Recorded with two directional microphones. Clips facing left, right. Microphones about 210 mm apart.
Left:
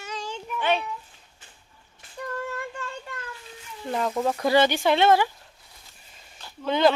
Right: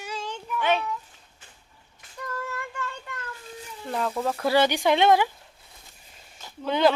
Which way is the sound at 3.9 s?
10° left (ahead or behind).